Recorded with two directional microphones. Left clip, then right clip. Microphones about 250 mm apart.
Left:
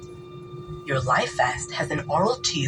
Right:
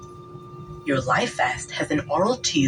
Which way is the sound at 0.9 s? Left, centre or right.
Right.